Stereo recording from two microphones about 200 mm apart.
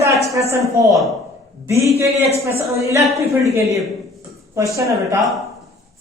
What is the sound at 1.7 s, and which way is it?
A man's voice, 15° right (ahead or behind).